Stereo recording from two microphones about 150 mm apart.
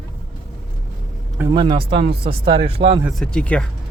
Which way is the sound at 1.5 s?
30° right (ahead or behind).